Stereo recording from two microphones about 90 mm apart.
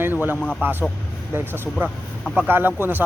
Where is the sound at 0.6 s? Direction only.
20° right (ahead or behind).